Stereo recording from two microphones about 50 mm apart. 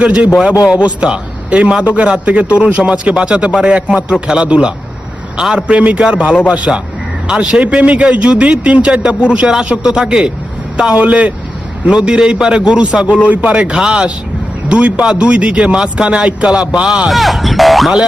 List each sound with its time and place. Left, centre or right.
0.0 s a man's voice: right
6.7 s a man's voice: centre
7.3 s a man's voice: centre
17.1 s speech: centre